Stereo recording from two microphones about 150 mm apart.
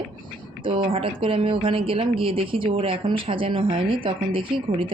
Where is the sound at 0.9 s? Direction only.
35° right (ahead or behind).